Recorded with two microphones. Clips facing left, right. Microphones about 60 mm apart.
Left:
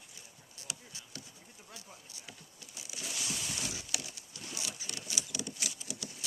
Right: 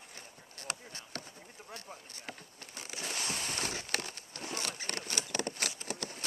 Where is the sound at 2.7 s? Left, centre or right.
Right.